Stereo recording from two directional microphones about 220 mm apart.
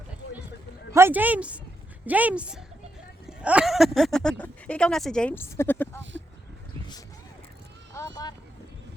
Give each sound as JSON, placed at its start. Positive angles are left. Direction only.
{"t": 0.9, "sound": "speech", "side_deg": -10}
{"t": 7.9, "sound": "vehicle", "side_deg": 15}